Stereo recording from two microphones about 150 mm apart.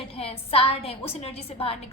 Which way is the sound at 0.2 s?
40° left (ahead or behind).